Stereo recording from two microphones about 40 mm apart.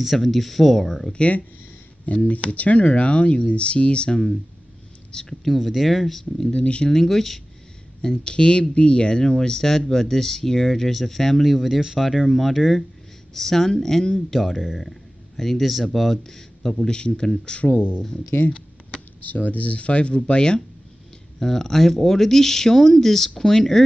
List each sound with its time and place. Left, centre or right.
0.0 s speech: centre
1.1 s speech: left
5.4 s speech: centre
6.3 s speech: centre
6.6 s speech: left
6.9 s speech: centre
8.0 s speech: left
11.5 s speech: centre
16.9 s speech: left
17.7 s speech: left
18.5 s a sound: left
19.2 s speech: left
21.4 s speech: centre